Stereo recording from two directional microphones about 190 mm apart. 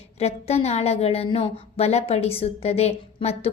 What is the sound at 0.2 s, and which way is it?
A woman's voice, 35° left (ahead or behind).